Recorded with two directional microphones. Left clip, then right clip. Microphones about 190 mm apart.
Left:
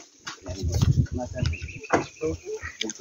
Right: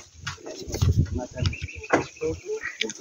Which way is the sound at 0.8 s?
5° left (ahead or behind).